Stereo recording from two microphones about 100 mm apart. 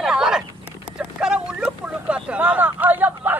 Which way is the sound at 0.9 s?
10° right (ahead or behind).